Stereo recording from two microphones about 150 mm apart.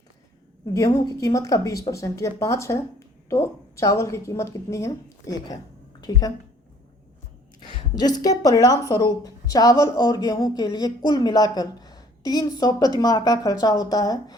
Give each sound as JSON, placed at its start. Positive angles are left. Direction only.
{"t": 0.7, "sound": "a woman's voice", "side_deg": 20}
{"t": 7.9, "sound": "a woman's voice", "side_deg": 25}